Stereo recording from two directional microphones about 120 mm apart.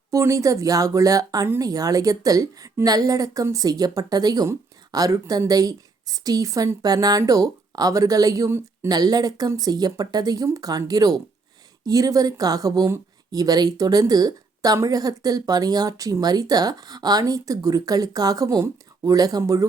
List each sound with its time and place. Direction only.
0.1 s speech: 25° right (ahead or behind)
8.9 s speech: 35° right (ahead or behind)